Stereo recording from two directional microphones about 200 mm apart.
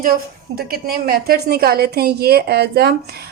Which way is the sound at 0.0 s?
50° right (ahead or behind).